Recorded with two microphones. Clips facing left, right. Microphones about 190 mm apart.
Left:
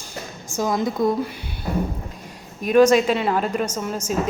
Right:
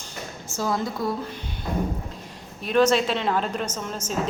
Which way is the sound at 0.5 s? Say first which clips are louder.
Left 4 dB; 15° left (ahead or behind).